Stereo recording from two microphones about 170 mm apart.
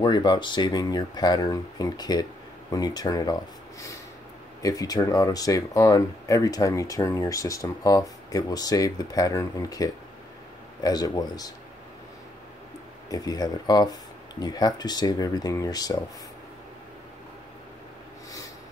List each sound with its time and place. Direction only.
0.0 s speech: 25° left (ahead or behind)
4.6 s speech: 20° left (ahead or behind)
13.1 s speech: 20° left (ahead or behind)